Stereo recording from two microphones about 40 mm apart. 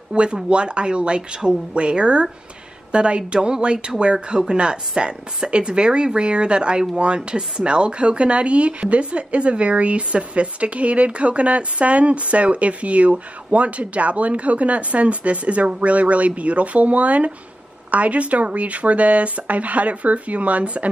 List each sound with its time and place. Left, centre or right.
0.1 s a woman's voice: right